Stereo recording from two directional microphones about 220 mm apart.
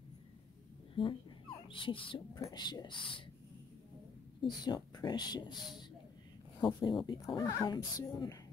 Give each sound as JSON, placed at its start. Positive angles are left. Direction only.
{"t": 0.9, "sound": "speech", "side_deg": 20}
{"t": 4.4, "sound": "speech", "side_deg": 20}
{"t": 6.6, "sound": "speech", "side_deg": 20}